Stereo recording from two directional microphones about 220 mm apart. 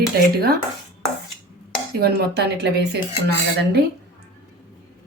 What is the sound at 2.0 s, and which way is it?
Speech, 50° right (ahead or behind).